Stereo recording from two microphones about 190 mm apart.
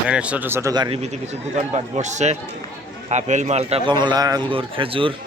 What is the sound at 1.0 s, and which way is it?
A man's voice, 35° right (ahead or behind).